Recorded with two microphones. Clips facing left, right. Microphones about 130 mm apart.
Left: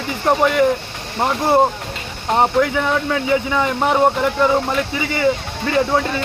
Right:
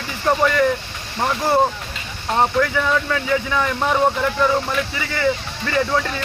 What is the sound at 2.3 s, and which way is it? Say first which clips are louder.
Speech: left 2 dB; 20° left (ahead or behind).